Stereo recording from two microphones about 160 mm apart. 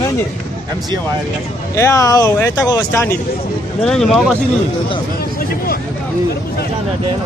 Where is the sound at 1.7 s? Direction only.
20° left (ahead or behind).